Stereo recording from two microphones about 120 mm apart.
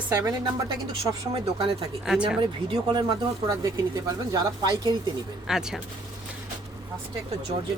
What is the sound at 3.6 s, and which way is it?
Speech, 30° right (ahead or behind).